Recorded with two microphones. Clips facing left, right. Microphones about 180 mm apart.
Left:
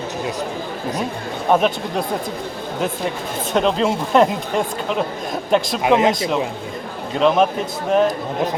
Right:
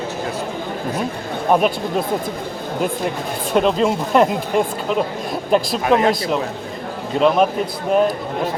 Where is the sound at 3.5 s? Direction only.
5° right (ahead or behind).